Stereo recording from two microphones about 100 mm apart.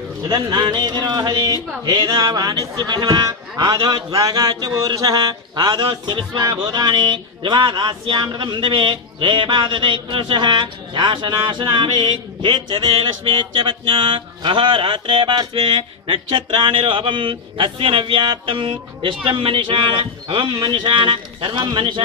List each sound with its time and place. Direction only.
0.3 s speech: 45° right (ahead or behind)